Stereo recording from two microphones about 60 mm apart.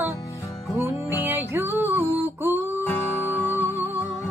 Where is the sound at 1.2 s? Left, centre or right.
Right.